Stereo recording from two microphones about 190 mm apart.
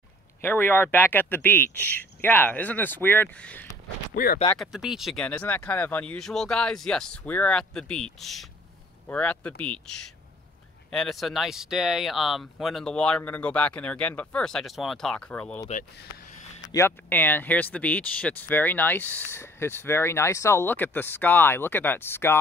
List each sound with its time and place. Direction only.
0.4 s speech: 10° left (ahead or behind)
4.1 s speech: 50° left (ahead or behind)
4.6 s speech: centre (ahead or behind)
10.9 s speech: centre (ahead or behind)
16.7 s speech: 15° left (ahead or behind)